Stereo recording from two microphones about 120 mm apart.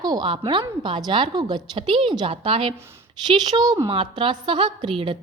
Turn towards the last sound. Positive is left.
turn(degrees=-45)  # may be behind; listen again after turning